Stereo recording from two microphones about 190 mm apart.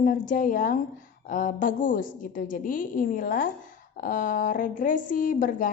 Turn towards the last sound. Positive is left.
turn(degrees=45)  # may be behind; listen again after turning